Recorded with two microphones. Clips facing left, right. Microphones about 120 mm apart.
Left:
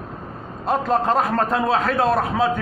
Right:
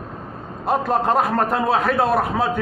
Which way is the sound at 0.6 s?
15° right (ahead or behind).